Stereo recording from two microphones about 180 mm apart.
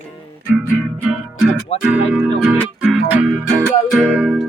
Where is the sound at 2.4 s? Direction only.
10° right (ahead or behind).